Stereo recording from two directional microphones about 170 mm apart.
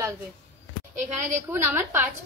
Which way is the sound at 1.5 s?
15° right (ahead or behind).